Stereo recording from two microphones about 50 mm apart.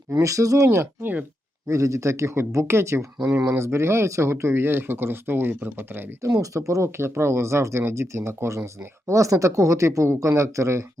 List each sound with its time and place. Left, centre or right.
0.1 s speech: right
6.2 s speech: right
9.0 s speech: right